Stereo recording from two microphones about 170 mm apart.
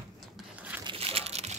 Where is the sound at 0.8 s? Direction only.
35° right (ahead or behind).